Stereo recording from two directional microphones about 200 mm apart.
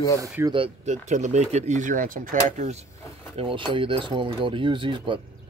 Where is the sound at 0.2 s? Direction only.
20° right (ahead or behind).